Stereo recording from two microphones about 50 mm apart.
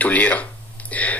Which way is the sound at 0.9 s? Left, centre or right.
Left.